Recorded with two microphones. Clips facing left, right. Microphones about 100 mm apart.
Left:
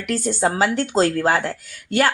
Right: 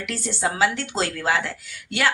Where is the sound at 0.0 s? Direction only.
45° left (ahead or behind).